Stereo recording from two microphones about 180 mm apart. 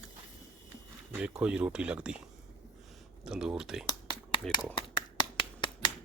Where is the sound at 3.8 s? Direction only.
25° left (ahead or behind).